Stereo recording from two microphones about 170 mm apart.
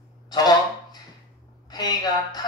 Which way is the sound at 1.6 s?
25° left (ahead or behind).